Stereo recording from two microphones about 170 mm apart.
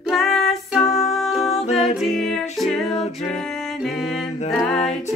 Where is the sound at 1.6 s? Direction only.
35° left (ahead or behind).